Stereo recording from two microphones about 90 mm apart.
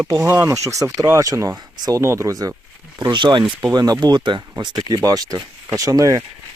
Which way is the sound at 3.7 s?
50° right (ahead or behind).